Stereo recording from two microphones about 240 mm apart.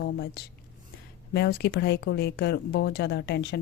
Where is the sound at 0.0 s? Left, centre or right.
Left.